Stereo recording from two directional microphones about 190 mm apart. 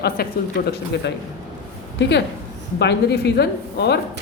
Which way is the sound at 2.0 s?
65° left (ahead or behind).